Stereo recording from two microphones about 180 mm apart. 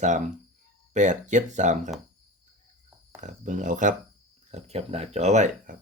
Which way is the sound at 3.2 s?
45° right (ahead or behind).